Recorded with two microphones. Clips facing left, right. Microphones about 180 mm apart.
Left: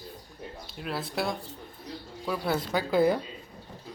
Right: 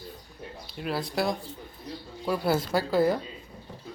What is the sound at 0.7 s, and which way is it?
Speech, centre (ahead or behind).